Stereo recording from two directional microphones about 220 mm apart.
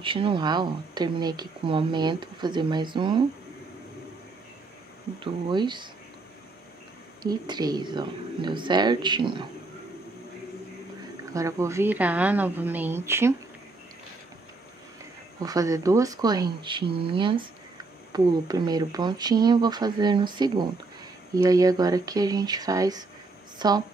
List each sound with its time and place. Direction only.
0.0 s speech: 25° right (ahead or behind)
5.2 s speech: 20° right (ahead or behind)
7.2 s speech: 20° right (ahead or behind)
11.3 s a woman's voice: 15° right (ahead or behind)
15.4 s a woman's voice: 15° right (ahead or behind)